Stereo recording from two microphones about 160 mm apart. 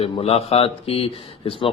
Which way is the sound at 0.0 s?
40° left (ahead or behind).